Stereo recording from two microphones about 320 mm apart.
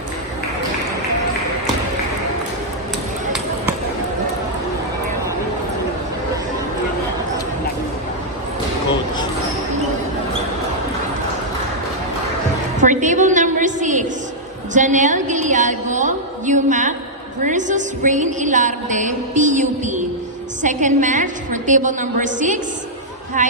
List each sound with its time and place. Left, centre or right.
12.8 s a sound: right
17.4 s music: right
20.6 s a woman's voice: right